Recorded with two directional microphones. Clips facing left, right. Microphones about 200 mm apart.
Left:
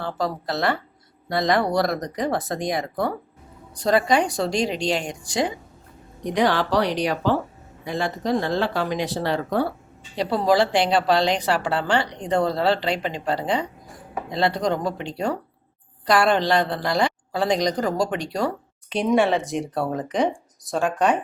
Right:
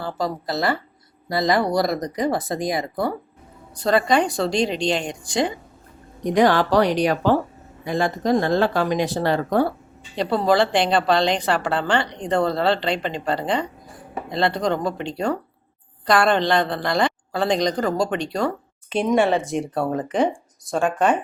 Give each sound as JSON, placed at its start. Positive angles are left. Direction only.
{"t": 0.0, "sound": "speech", "side_deg": 0}
{"t": 3.8, "sound": "a woman's voice", "side_deg": 10}
{"t": 6.3, "sound": "speech", "side_deg": -45}
{"t": 10.2, "sound": "a woman's voice", "side_deg": 10}
{"t": 18.9, "sound": "speech", "side_deg": 0}